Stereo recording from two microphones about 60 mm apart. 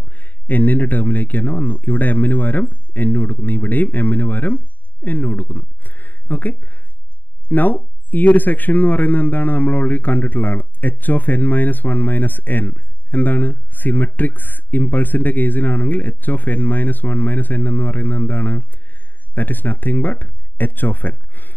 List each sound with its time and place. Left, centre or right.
0.0 s speech: left